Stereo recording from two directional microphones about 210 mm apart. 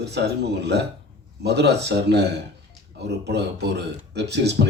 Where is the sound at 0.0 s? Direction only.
55° right (ahead or behind).